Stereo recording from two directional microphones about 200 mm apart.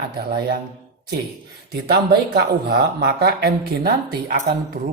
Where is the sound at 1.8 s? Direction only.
55° right (ahead or behind).